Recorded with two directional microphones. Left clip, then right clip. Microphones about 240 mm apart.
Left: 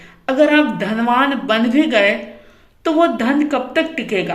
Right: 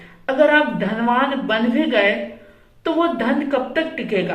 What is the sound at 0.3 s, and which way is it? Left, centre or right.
A woman's voice, left.